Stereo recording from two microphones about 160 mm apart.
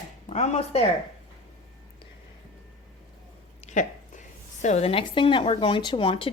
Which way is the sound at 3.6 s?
50° left (ahead or behind).